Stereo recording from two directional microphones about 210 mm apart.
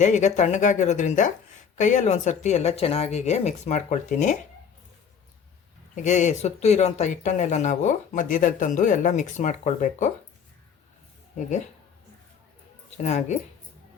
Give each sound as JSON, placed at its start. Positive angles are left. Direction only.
{"t": 0.0, "sound": "speech", "side_deg": 35}
{"t": 5.9, "sound": "speech", "side_deg": 35}
{"t": 13.0, "sound": "speech", "side_deg": 35}